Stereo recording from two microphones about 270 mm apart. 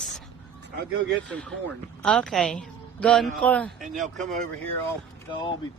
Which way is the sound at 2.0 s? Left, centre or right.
Centre.